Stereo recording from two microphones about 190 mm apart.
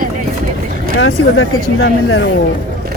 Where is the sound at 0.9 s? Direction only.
90° left.